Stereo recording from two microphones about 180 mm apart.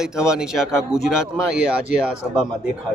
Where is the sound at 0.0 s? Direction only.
5° right (ahead or behind).